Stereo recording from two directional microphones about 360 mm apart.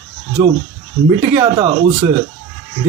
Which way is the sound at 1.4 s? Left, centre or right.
Centre.